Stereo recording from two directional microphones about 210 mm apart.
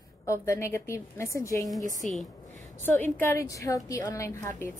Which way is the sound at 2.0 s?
5° left (ahead or behind).